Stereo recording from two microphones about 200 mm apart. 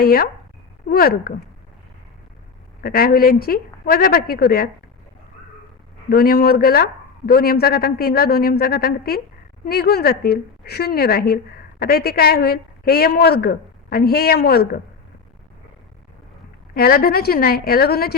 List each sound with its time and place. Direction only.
0.0 s a woman's voice: 50° left (ahead or behind)
2.8 s a woman's voice: 45° left (ahead or behind)
6.1 s a woman's voice: 50° left (ahead or behind)
16.7 s a woman's voice: 50° left (ahead or behind)